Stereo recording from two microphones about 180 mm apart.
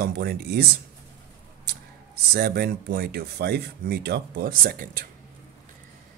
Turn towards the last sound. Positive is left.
turn(degrees=-50)  # may be behind; listen again after turning